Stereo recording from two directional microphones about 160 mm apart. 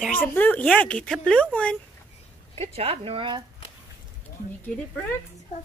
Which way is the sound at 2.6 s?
40° right (ahead or behind).